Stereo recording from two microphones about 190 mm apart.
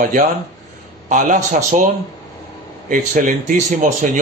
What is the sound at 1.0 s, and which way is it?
Speech, 40° right (ahead or behind).